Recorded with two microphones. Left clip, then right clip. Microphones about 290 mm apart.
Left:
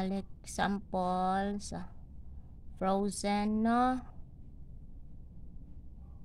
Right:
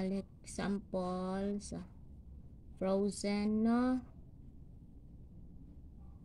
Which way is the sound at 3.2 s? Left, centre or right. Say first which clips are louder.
Left 5 dB; left.